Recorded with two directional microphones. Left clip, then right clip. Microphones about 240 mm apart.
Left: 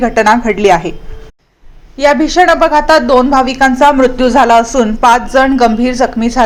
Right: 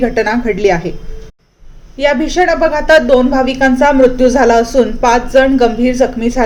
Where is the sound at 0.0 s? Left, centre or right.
Centre.